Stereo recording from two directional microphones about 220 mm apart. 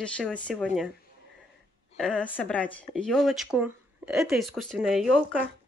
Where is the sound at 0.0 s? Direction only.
5° left (ahead or behind).